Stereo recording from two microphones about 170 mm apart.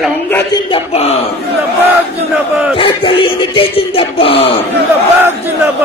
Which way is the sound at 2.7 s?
30° left (ahead or behind).